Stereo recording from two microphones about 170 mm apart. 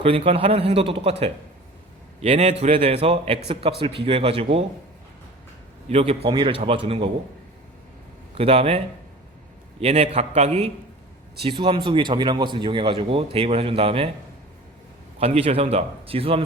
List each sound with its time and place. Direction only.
0.0 s speech: 35° right (ahead or behind)
2.2 s speech: 35° right (ahead or behind)
5.9 s speech: 35° right (ahead or behind)
8.4 s speech: 35° right (ahead or behind)
9.8 s speech: 35° right (ahead or behind)
11.9 s speech: 30° right (ahead or behind)
15.2 s speech: 35° right (ahead or behind)